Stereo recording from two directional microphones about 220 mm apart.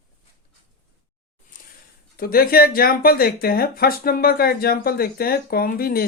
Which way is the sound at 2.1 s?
45° left (ahead or behind).